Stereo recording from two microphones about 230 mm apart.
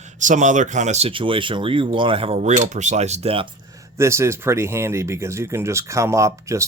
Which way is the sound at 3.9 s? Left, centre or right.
Centre.